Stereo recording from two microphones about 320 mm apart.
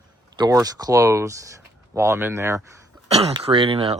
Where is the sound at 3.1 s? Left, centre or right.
Centre.